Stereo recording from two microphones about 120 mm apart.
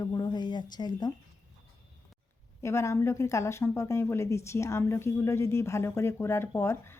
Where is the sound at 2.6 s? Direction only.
25° left (ahead or behind).